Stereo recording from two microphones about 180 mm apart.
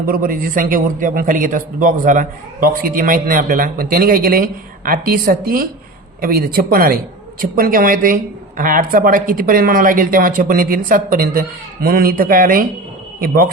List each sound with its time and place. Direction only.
0.0 s a woman's voice: 50° right (ahead or behind)